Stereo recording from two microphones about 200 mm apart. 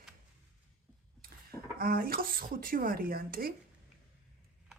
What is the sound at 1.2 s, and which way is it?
Speech, 50° right (ahead or behind).